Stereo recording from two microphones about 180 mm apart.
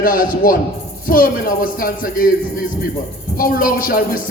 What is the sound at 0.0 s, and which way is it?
A man's voice, 50° left (ahead or behind).